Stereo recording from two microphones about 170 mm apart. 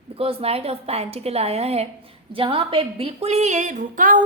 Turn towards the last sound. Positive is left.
turn(degrees=-50)  # may be behind; listen again after turning